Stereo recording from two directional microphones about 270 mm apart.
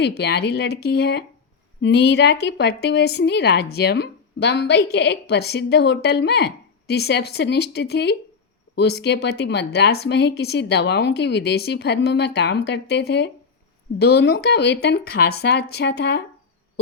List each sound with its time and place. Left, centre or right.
0.0 s a woman's voice: left